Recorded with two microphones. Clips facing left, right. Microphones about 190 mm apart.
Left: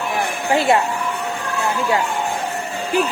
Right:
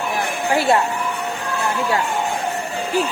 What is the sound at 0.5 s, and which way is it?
Speech, 20° left (ahead or behind).